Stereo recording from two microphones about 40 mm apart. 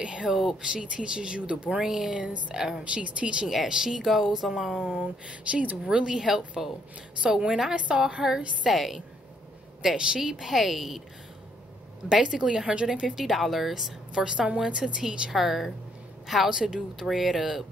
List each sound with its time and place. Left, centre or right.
0.0 s speech: right
0.3 s speech: centre
0.6 s speech: right
1.8 s speech: centre
2.8 s speech: right
3.6 s speech: centre
4.8 s speech: right
5.9 s speech: right; by 9.0 s centre
9.9 s speech: right
10.4 s speech: centre
12.1 s speech: centre
13.2 s speech: centre
14.1 s speech: right
15.3 s speech: centre